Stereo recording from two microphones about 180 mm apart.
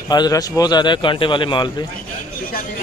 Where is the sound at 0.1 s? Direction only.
20° left (ahead or behind).